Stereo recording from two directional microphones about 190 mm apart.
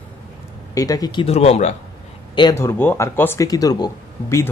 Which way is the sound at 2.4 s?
20° left (ahead or behind).